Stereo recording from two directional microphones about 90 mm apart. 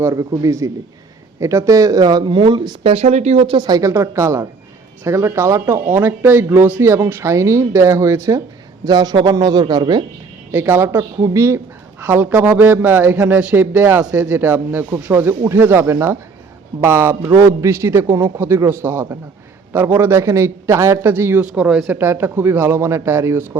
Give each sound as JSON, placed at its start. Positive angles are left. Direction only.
{"t": 0.0, "sound": "speech", "side_deg": -40}
{"t": 3.7, "sound": "speech", "side_deg": -40}
{"t": 8.8, "sound": "speech", "side_deg": -45}
{"t": 10.5, "sound": "a man's voice", "side_deg": -25}
{"t": 21.5, "sound": "a man's voice", "side_deg": -10}
{"t": 21.8, "sound": "a man's voice", "side_deg": -25}